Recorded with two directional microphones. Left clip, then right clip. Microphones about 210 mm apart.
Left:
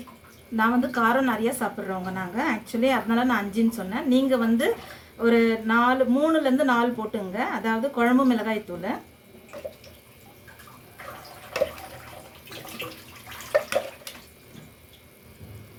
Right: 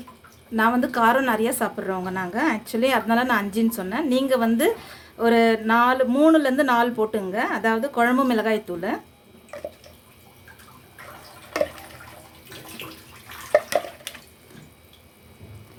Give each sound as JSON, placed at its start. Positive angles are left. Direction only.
{"t": 0.5, "sound": "speech", "side_deg": -45}